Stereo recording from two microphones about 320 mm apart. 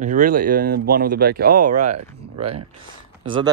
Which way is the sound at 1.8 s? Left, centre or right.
Right.